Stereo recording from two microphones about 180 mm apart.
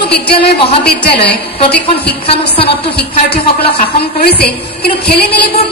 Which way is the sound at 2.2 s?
30° left (ahead or behind).